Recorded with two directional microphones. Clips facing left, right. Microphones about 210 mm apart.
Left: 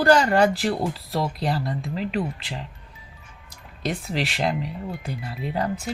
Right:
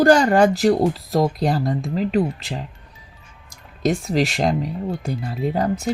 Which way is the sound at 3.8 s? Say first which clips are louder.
Right 8 dB; 45° right (ahead or behind).